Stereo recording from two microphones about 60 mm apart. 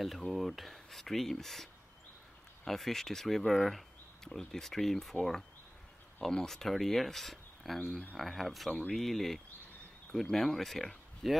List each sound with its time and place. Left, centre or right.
0.0 s speech: centre